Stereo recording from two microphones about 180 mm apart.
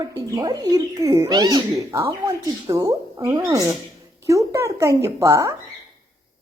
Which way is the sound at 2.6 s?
20° right (ahead or behind).